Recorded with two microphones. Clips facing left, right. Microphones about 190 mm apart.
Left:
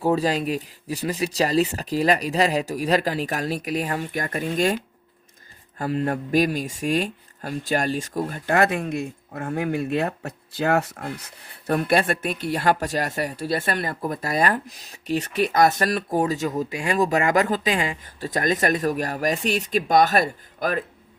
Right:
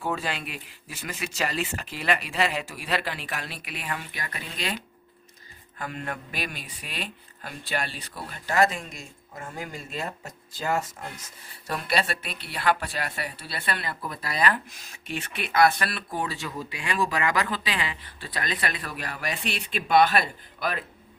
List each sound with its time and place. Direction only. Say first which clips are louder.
0.0 s speech: left 9 dB; 35° left (ahead or behind)
5.7 s speech: left 10 dB; 35° left (ahead or behind)